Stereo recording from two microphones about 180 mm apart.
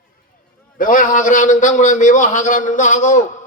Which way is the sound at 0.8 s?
50° left (ahead or behind).